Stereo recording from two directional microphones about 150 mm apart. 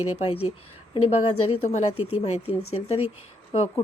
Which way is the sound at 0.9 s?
40° left (ahead or behind).